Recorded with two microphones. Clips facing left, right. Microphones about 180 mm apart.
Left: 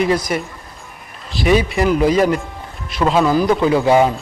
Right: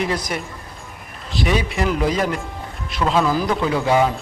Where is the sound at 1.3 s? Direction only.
Centre (ahead or behind).